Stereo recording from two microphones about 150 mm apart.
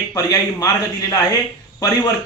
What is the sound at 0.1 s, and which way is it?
A man's voice, 25° left (ahead or behind).